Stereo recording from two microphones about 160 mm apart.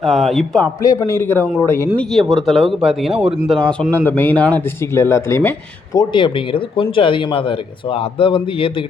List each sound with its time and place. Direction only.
0.0 s speech: centre (ahead or behind)
0.8 s speech: 20° left (ahead or behind)
2.0 s speech: centre (ahead or behind)
6.0 s speech: 30° left (ahead or behind)